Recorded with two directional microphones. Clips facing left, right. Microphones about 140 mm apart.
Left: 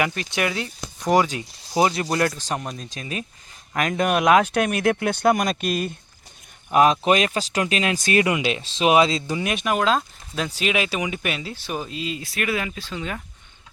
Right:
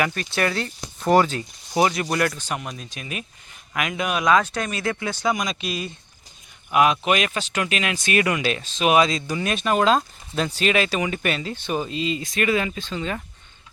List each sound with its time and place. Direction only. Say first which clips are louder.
0.0 s speech: right 1 dB; 20° left (ahead or behind)
1.9 s speech: left 1 dB; 30° left (ahead or behind)
3.8 s speech: left 4 dB; 45° left (ahead or behind)
6.7 s speech: left 2 dB; 35° left (ahead or behind); by 9.7 s 15° left (ahead or behind)
9.7 s speech: right 3 dB; centre (ahead or behind)